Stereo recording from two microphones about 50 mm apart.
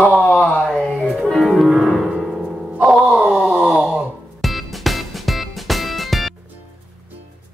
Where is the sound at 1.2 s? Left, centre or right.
Centre.